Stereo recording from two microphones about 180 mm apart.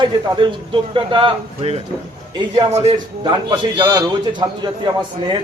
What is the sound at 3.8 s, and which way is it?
Speech, 25° right (ahead or behind).